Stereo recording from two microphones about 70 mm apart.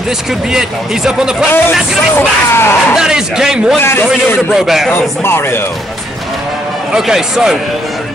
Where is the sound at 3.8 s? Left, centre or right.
Left.